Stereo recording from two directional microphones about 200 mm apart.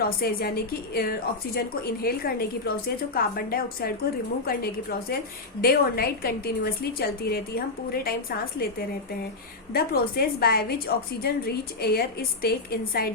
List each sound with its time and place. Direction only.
0.0 s a woman's voice: 50° left (ahead or behind)
9.7 s a woman's voice: 50° left (ahead or behind)